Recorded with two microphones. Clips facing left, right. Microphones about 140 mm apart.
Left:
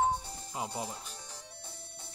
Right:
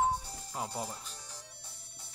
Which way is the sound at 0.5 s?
5° left (ahead or behind).